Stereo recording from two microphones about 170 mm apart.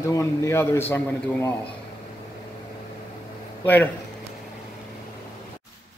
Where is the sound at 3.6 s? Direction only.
10° left (ahead or behind).